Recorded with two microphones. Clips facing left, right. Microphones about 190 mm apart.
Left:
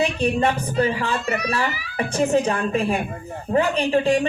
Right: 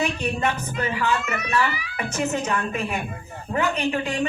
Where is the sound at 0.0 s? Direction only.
30° left (ahead or behind).